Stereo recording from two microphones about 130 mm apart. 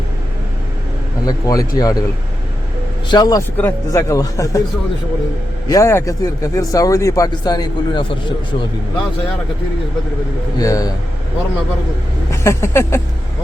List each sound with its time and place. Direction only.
1.2 s speech: 30° left (ahead or behind)
3.1 s speech: 30° left (ahead or behind)
3.6 s speech: 20° left (ahead or behind)
5.6 s speech: 25° left (ahead or behind)
10.6 s speech: 25° left (ahead or behind)
12.3 s a sound: 20° left (ahead or behind)